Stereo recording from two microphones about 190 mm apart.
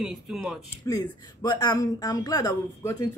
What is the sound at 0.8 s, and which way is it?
Speech, 15° left (ahead or behind).